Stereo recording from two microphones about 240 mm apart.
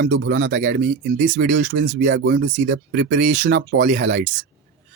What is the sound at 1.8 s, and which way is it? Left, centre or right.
Speech, right.